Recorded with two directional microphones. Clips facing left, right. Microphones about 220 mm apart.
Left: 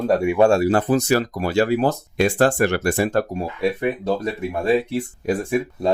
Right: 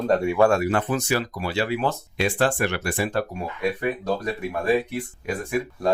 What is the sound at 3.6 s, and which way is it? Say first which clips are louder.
Speech: left 3 dB; 25° left (ahead or behind).